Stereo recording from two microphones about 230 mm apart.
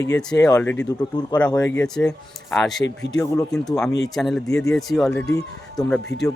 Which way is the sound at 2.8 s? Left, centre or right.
Left.